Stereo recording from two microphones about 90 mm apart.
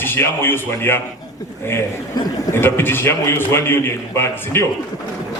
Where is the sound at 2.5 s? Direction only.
25° left (ahead or behind).